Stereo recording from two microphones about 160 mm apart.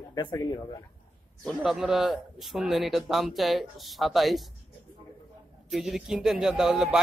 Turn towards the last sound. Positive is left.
turn(degrees=-5)  # may be behind; listen again after turning